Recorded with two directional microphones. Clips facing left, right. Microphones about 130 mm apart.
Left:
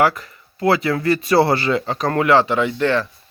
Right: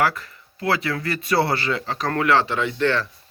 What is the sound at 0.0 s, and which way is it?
Speech, 20° left (ahead or behind).